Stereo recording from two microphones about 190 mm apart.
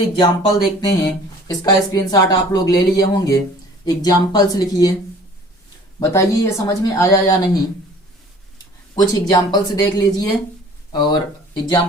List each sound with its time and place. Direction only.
0.2 s speech: 20° left (ahead or behind)
6.0 s speech: 15° left (ahead or behind)
9.0 s speech: 20° left (ahead or behind)